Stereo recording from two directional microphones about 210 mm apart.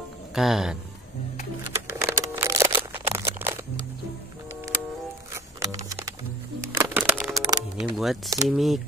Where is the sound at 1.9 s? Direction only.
10° right (ahead or behind).